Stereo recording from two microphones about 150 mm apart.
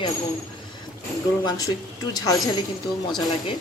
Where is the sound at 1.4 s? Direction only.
25° left (ahead or behind).